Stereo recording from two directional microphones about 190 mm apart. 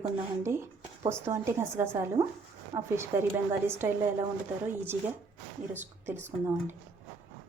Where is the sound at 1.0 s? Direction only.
15° right (ahead or behind).